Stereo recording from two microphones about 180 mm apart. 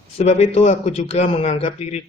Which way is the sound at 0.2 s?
35° left (ahead or behind).